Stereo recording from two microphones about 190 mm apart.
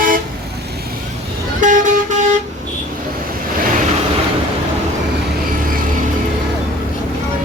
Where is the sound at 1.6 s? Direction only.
40° right (ahead or behind).